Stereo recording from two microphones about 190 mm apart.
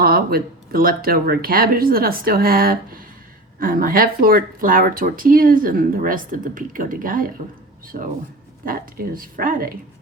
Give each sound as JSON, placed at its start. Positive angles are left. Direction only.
{"t": 0.0, "sound": "speech", "side_deg": -50}
{"t": 8.6, "sound": "speech", "side_deg": -50}